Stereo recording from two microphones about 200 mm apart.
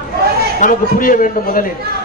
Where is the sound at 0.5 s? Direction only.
40° left (ahead or behind).